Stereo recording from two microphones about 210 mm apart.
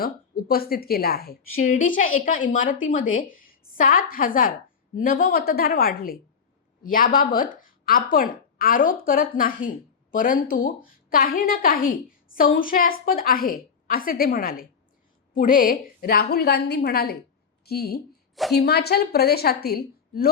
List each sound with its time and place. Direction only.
0.0 s a woman's voice: 45° left (ahead or behind)